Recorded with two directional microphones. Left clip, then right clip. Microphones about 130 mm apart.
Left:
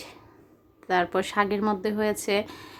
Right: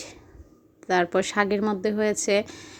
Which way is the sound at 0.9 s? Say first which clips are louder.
Right 2 dB; 30° right (ahead or behind).